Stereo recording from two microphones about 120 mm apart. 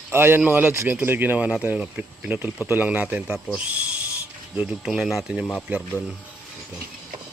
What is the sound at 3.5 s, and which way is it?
Owl, 10° right (ahead or behind).